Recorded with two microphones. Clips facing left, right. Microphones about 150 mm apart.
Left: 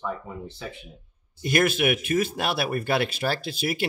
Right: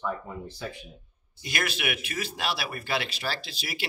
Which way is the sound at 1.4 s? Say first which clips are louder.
Left 9 dB; 50° left (ahead or behind).